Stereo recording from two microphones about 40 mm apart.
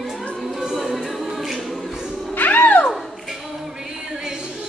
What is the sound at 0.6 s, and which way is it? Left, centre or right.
A capella, centre.